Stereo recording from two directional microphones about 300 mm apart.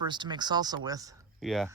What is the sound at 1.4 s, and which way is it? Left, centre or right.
Speech, centre.